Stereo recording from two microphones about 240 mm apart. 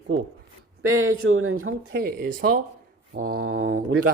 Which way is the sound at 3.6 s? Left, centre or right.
Right.